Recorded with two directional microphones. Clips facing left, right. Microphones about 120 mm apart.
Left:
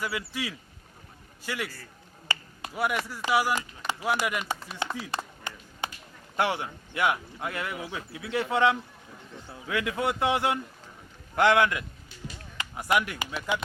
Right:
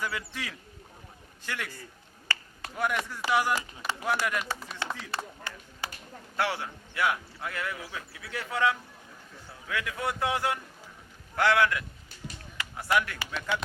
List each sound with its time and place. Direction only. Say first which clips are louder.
0.0 s speech: left 3 dB; 5° left (ahead or behind)
2.2 s finger snapping: left 2 dB; 15° left (ahead or behind)
3.2 s speech: left 1 dB; 10° left (ahead or behind)
5.1 s a sound: left 1 dB; 20° left (ahead or behind)
6.3 s a man's voice: left 3 dB; 20° left (ahead or behind)